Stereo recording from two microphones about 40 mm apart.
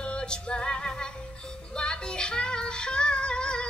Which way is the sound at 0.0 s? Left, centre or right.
Left.